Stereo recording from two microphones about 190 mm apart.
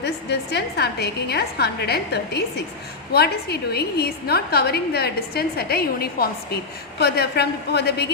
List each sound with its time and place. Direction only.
0.0 s a woman's voice: 60° left (ahead or behind)